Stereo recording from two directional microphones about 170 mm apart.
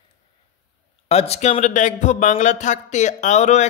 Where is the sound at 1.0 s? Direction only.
35° left (ahead or behind).